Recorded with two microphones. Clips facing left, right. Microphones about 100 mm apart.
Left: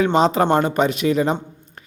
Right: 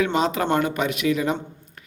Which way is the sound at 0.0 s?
30° left (ahead or behind).